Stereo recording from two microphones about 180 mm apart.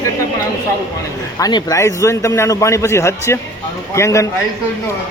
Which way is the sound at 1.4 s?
20° left (ahead or behind).